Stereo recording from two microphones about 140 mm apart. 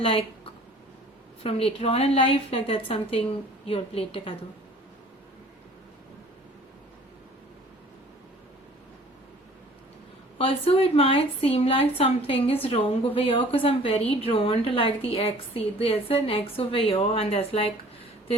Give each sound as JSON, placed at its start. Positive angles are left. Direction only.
{"t": 0.0, "sound": "a woman's voice", "side_deg": 40}
{"t": 1.5, "sound": "a woman's voice", "side_deg": 45}
{"t": 10.3, "sound": "a woman's voice", "side_deg": 45}